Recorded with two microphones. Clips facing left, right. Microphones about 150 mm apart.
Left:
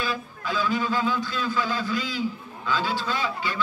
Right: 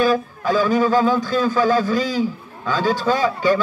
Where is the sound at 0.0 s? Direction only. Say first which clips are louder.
Right 12 dB; 45° right (ahead or behind).